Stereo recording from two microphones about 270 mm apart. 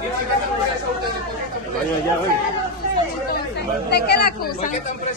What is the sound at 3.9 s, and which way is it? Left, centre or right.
Speech, left.